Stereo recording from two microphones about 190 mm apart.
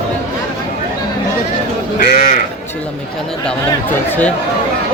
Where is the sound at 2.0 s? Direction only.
50° left (ahead or behind).